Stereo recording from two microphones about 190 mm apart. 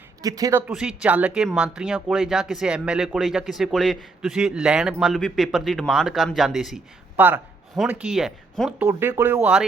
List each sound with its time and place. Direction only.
0.2 s speech: 20° right (ahead or behind)
0.7 s speech: 5° right (ahead or behind)
8.9 s speech: 10° right (ahead or behind)